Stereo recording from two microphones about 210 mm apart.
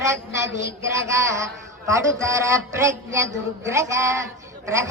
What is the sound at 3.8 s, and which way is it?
Music, 15° right (ahead or behind).